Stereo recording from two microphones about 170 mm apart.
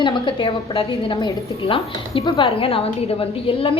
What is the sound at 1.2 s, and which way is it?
Speech, 20° left (ahead or behind).